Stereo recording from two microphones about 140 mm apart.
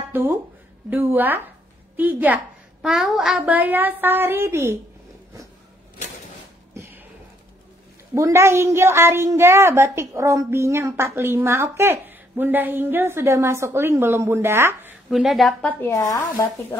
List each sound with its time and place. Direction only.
0.1 s a woman's voice: 15° right (ahead or behind)
6.7 s a sound: 20° right (ahead or behind)
8.1 s a woman's voice: 20° right (ahead or behind)
15.0 s a woman's voice: centre (ahead or behind)
15.9 s speech: 25° left (ahead or behind)